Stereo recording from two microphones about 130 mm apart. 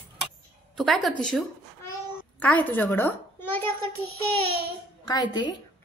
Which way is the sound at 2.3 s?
10° left (ahead or behind).